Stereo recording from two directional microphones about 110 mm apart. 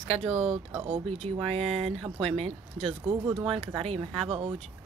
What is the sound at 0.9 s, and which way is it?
Speech, 60° right (ahead or behind).